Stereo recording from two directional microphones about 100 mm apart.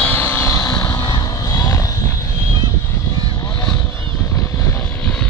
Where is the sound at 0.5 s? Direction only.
35° left (ahead or behind).